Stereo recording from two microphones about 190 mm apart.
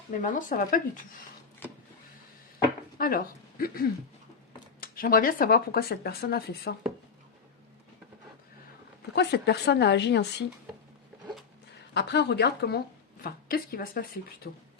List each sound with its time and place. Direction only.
0.2 s speech: 45° left (ahead or behind)
3.0 s speech: 50° left (ahead or behind)
9.1 s a woman's voice: 60° left (ahead or behind)
11.9 s a woman's voice: 60° left (ahead or behind)